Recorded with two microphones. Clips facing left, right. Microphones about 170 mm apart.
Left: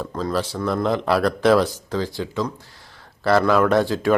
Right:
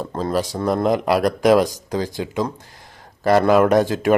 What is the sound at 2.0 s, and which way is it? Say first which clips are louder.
Speech: right 1 dB; 45° right (ahead or behind).